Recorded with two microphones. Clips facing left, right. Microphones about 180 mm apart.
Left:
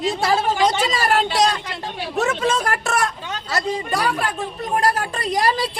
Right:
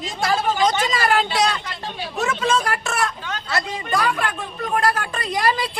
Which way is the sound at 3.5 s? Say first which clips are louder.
Left 1 dB; 35° left (ahead or behind).